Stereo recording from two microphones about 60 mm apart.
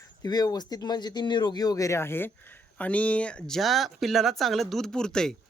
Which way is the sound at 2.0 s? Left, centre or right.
Left.